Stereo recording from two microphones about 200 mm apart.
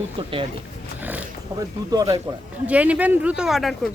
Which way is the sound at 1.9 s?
20° right (ahead or behind).